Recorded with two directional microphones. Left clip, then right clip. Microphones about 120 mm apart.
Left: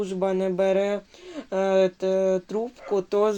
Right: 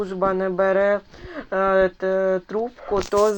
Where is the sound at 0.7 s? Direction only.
10° left (ahead or behind).